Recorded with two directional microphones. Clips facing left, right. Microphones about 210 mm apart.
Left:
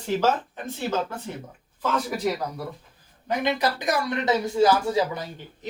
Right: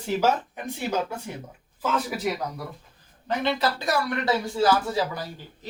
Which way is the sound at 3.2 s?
15° left (ahead or behind).